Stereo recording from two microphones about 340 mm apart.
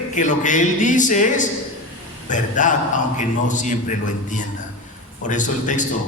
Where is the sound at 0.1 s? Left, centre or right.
Left.